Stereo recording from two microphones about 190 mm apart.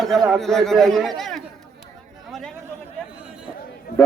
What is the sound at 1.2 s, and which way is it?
Chatter, centre (ahead or behind).